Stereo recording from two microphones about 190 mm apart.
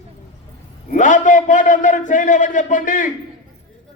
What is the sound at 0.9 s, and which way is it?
A man's voice, 40° left (ahead or behind).